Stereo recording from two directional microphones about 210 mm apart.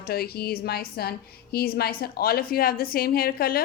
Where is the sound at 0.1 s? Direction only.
50° left (ahead or behind).